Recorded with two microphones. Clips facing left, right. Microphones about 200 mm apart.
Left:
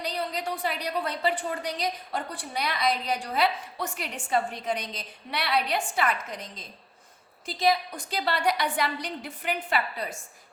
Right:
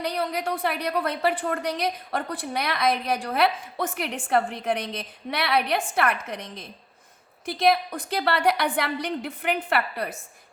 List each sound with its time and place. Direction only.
0.0 s a woman's voice: 55° right (ahead or behind)